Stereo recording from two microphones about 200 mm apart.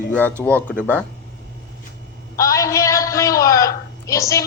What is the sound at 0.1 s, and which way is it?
Speech, 10° left (ahead or behind).